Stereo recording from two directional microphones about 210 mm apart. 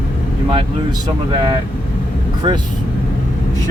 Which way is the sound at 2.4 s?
20° right (ahead or behind).